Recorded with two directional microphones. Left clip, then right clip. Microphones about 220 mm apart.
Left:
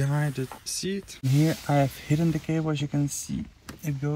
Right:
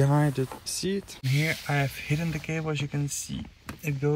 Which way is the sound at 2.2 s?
Centre (ahead or behind).